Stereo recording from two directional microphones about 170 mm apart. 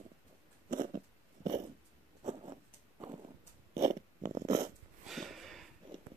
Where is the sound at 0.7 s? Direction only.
50° right (ahead or behind).